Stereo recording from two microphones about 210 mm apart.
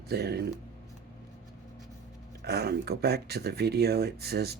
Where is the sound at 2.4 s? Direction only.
50° right (ahead or behind).